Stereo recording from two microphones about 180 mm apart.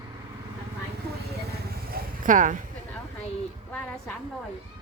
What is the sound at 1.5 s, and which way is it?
Vehicle, 55° right (ahead or behind).